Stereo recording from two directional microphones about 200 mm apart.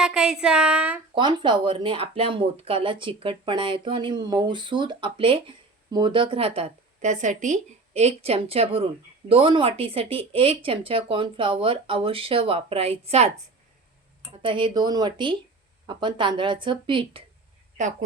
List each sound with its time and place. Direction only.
0.0 s speech: 5° right (ahead or behind)
1.1 s speech: 25° right (ahead or behind)
14.4 s speech: 25° right (ahead or behind)